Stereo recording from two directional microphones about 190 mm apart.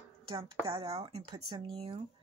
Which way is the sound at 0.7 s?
30° right (ahead or behind).